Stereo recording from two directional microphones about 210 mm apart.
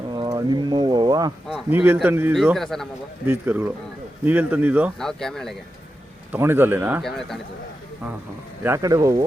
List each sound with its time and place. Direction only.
0.1 s a sound: 20° right (ahead or behind)
1.5 s a man's voice: 5° right (ahead or behind)
3.2 s speech: 10° right (ahead or behind)
4.9 s a man's voice: centre (ahead or behind)
6.3 s speech: 10° right (ahead or behind)
8.6 s speech: 15° right (ahead or behind)